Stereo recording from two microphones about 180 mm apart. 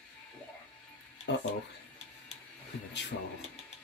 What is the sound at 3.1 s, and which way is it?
Speech, 90° left.